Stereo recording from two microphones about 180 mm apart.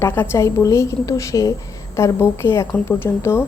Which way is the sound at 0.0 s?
15° left (ahead or behind).